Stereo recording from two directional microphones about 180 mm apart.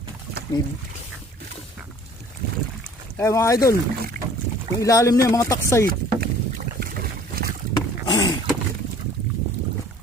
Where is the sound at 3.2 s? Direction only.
15° left (ahead or behind).